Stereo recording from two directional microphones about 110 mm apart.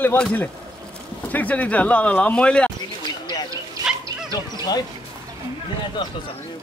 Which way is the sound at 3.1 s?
40° left (ahead or behind).